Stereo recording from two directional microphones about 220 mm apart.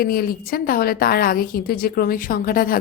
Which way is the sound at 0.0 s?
40° left (ahead or behind).